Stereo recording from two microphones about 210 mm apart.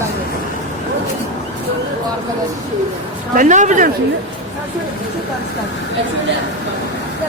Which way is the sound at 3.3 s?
35° right (ahead or behind).